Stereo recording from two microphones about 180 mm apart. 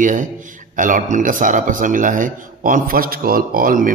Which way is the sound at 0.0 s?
45° right (ahead or behind).